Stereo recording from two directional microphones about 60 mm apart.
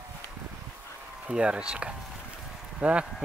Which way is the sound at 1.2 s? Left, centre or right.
Centre.